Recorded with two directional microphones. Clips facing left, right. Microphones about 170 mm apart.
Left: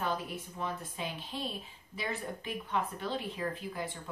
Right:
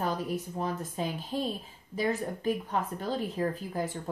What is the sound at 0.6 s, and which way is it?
A woman's voice, 40° right (ahead or behind).